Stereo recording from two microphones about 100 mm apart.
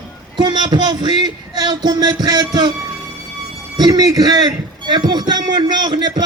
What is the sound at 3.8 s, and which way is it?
Speech, 40° right (ahead or behind).